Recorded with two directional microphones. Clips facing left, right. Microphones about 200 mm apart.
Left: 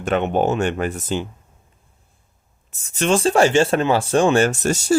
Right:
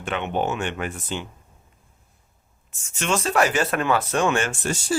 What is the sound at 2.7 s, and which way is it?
Speech, 35° left (ahead or behind).